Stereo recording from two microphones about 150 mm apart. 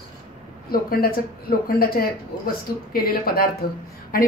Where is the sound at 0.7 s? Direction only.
85° left.